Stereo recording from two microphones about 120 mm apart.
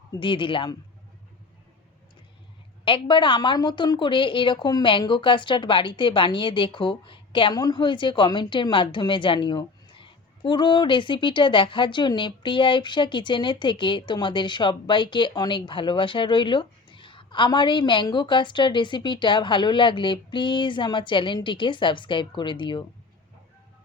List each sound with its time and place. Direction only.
0.2 s a man's voice: 45° left (ahead or behind)
2.8 s a woman's voice: 45° left (ahead or behind)